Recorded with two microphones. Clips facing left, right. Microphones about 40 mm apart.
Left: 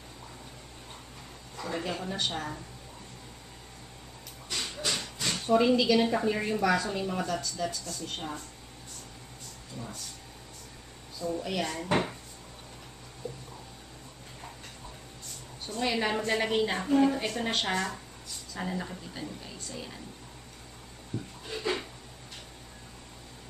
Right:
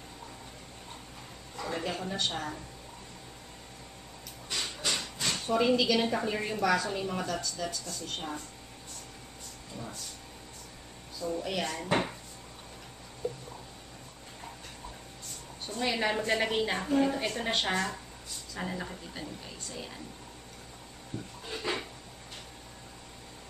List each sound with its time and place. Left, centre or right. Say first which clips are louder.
1.6 s a woman's voice: even; centre
4.5 s a sound: even; centre
5.2 s a woman's voice: left 3 dB; centre
11.2 s a woman's voice: left 1 dB; centre
15.6 s a woman's voice: left 1 dB; centre